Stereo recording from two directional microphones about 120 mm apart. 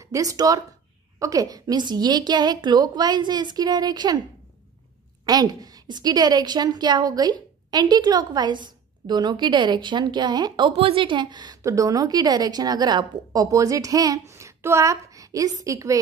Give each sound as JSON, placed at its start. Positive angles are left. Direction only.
{"t": 0.0, "sound": "a woman's voice", "side_deg": -30}
{"t": 5.2, "sound": "a woman's voice", "side_deg": -35}
{"t": 10.8, "sound": "a woman's voice", "side_deg": -45}